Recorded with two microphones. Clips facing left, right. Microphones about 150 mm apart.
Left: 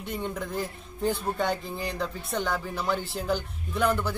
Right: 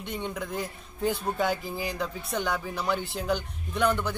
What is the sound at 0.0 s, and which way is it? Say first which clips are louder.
Speech: left 1 dB; centre (ahead or behind).